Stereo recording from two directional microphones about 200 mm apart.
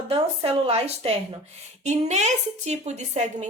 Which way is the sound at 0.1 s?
30° right (ahead or behind).